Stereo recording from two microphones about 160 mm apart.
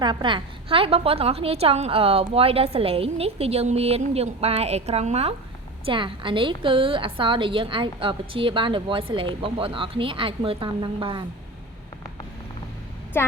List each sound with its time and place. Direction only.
0.0 s a woman's voice: 30° right (ahead or behind)
13.2 s speech: 15° left (ahead or behind)